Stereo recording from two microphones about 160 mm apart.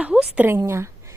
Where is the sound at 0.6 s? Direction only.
15° right (ahead or behind).